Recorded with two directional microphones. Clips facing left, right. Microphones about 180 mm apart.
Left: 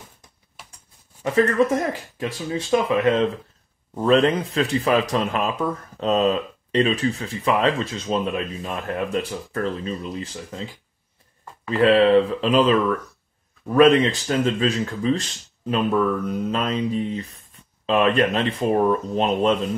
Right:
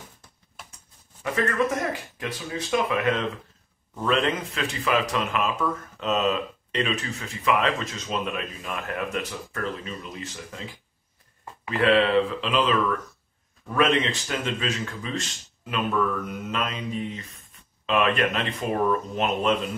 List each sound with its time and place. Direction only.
1.2 s speech: 25° left (ahead or behind)
11.8 s speech: 40° left (ahead or behind)
13.7 s speech: 35° left (ahead or behind)